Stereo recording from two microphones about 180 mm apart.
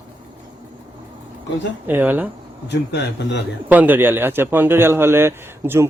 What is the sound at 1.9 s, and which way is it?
Speech, 10° right (ahead or behind).